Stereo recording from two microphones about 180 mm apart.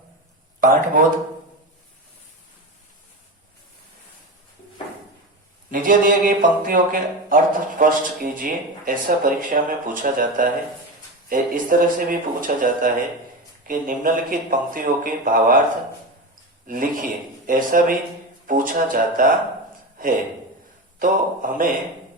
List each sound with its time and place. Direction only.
0.6 s speech: 45° right (ahead or behind)
5.7 s speech: 50° right (ahead or behind)
16.6 s speech: 50° right (ahead or behind)
21.0 s speech: 50° right (ahead or behind)